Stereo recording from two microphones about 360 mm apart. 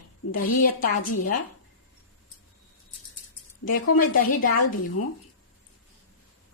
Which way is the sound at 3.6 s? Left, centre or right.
Left.